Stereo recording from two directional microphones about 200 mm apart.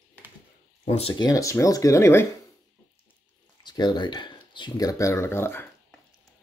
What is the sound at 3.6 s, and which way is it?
Speech, 20° left (ahead or behind).